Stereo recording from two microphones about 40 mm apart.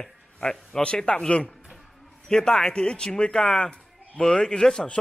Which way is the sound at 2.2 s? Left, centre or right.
Centre.